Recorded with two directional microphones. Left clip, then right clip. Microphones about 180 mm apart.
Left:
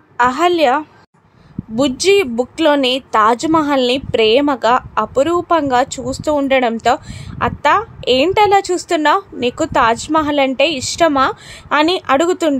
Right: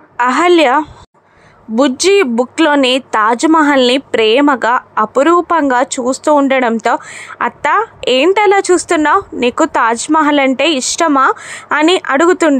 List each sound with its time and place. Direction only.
0.2 s a woman's voice: 25° right (ahead or behind)